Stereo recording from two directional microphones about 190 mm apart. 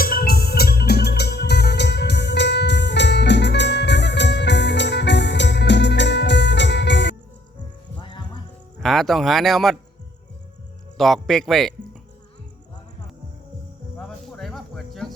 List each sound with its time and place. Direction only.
0.0 s music: 50° left (ahead or behind); by 7.2 s 65° left (ahead or behind)
7.9 s music: 25° left (ahead or behind)
8.8 s speech: centre (ahead or behind)
10.9 s speech: centre (ahead or behind)
14.3 s cricket: centre (ahead or behind)